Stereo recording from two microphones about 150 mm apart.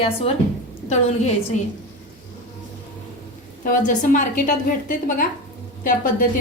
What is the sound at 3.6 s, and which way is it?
A woman's voice, 60° left (ahead or behind).